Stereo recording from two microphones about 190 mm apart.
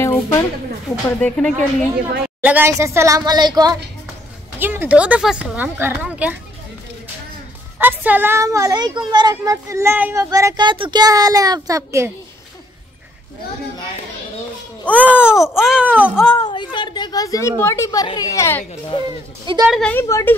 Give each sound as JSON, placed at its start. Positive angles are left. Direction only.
{"t": 0.0, "sound": "a sound", "side_deg": 15}
{"t": 0.9, "sound": "speech", "side_deg": 0}
{"t": 2.2, "sound": "a woman's voice", "side_deg": -10}
{"t": 4.6, "sound": "a woman's voice", "side_deg": -10}
{"t": 7.8, "sound": "a woman's voice", "side_deg": -10}
{"t": 14.9, "sound": "a woman's voice", "side_deg": -10}
{"t": 16.3, "sound": "a sound", "side_deg": 25}
{"t": 16.7, "sound": "a woman's voice", "side_deg": 25}
{"t": 18.9, "sound": "a woman's voice", "side_deg": 25}
{"t": 19.4, "sound": "speech", "side_deg": -20}
{"t": 19.7, "sound": "speech", "side_deg": 5}